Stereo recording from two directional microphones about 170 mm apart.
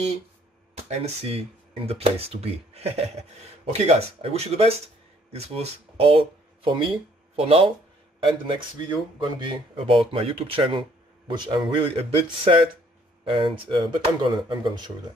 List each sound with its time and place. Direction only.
0.8 s speech: 35° right (ahead or behind)